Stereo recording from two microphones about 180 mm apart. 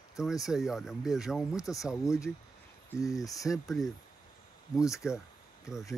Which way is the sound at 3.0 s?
20° left (ahead or behind).